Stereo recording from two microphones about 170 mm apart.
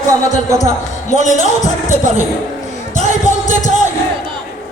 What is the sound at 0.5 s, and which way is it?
Speech, 45° left (ahead or behind).